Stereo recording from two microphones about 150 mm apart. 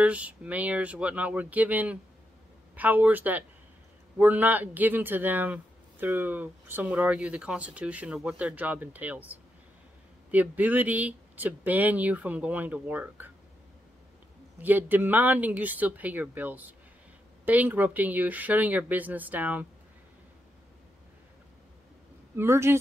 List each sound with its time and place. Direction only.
0.0 s speech: 10° right (ahead or behind)
14.6 s speech: 10° right (ahead or behind)
22.3 s speech: 15° right (ahead or behind)